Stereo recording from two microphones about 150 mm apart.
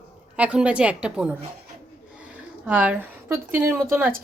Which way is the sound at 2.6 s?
10° right (ahead or behind).